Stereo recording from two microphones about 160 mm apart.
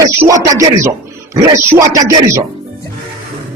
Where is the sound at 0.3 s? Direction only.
20° right (ahead or behind).